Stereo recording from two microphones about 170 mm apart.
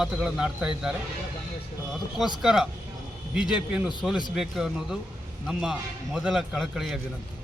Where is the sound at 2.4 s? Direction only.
Centre (ahead or behind).